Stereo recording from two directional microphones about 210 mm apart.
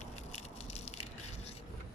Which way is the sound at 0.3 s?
30° left (ahead or behind).